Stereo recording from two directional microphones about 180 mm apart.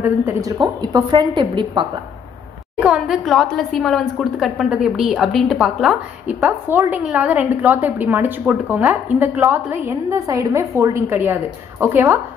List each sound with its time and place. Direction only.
0.0 s a woman's voice: 10° right (ahead or behind)
2.8 s a woman's voice: 5° right (ahead or behind)